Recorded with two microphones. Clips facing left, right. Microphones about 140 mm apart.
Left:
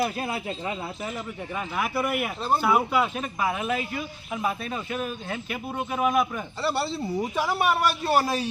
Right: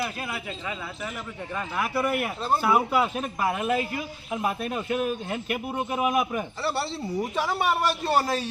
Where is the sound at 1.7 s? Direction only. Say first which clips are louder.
Right 1 dB; 5° left (ahead or behind); by 6.4 s 15° right (ahead or behind).